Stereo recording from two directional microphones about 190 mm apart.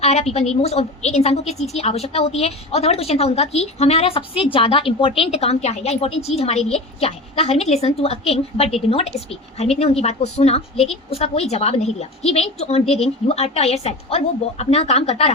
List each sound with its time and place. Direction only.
0.0 s a woman's voice: 35° left (ahead or behind)